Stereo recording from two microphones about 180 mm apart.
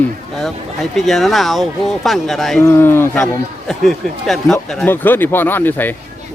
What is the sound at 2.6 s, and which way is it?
Speech, 15° left (ahead or behind).